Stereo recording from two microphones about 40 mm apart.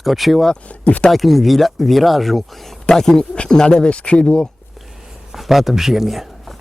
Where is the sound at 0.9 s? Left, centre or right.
Left.